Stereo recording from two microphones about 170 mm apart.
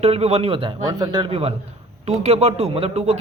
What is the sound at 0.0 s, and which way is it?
A man's voice, 35° right (ahead or behind).